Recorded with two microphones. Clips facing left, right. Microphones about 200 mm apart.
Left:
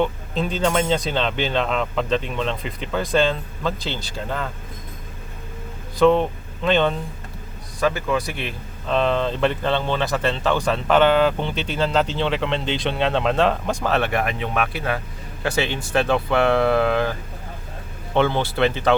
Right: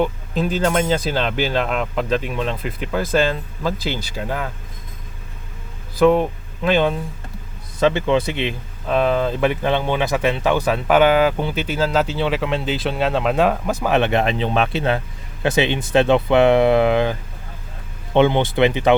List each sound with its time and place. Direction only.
0.0 s speech: 5° right (ahead or behind)
6.0 s speech: 5° right (ahead or behind)
7.8 s speech: 25° right (ahead or behind)
8.9 s speech: 10° right (ahead or behind)
13.8 s speech: 20° right (ahead or behind)